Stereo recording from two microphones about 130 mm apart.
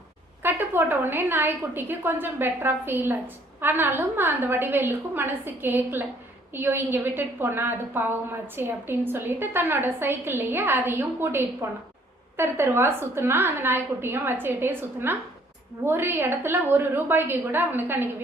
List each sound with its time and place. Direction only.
0.4 s a woman's voice: 15° right (ahead or behind)